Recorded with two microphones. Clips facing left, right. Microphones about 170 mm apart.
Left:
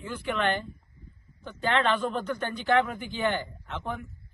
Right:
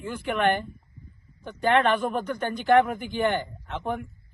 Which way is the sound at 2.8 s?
50° right (ahead or behind).